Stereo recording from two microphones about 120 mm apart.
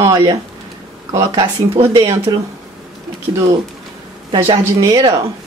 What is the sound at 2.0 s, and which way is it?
Speech, 25° right (ahead or behind).